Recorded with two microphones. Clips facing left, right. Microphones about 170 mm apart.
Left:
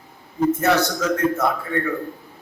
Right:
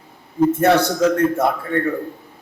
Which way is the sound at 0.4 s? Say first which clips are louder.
Right 4 dB; 30° right (ahead or behind).